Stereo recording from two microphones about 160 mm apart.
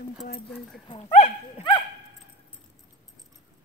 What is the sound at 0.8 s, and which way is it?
Speech, 30° left (ahead or behind).